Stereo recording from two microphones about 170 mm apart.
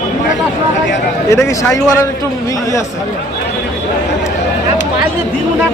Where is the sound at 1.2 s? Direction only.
15° left (ahead or behind).